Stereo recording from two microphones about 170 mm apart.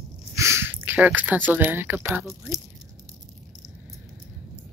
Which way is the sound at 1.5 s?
10° right (ahead or behind).